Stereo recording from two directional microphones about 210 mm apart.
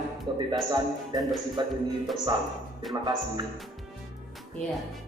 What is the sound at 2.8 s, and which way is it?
Music, centre (ahead or behind).